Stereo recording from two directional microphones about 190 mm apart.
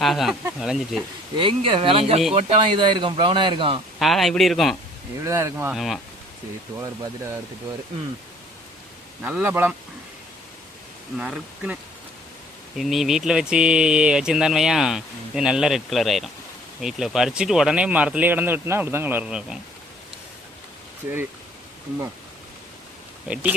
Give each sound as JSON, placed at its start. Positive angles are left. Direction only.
{"t": 0.0, "sound": "speech", "side_deg": 0}
{"t": 1.4, "sound": "speech", "side_deg": -25}
{"t": 4.0, "sound": "speech", "side_deg": 0}
{"t": 5.2, "sound": "speech", "side_deg": -15}
{"t": 5.7, "sound": "speech", "side_deg": 0}
{"t": 6.8, "sound": "speech", "side_deg": -20}
{"t": 9.2, "sound": "speech", "side_deg": -10}
{"t": 11.2, "sound": "speech", "side_deg": -5}
{"t": 23.3, "sound": "speech", "side_deg": -10}